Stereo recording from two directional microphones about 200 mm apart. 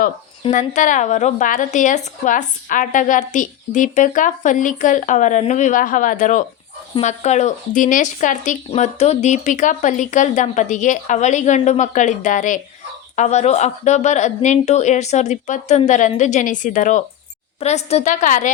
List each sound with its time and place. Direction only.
0.5 s speech: 35° left (ahead or behind)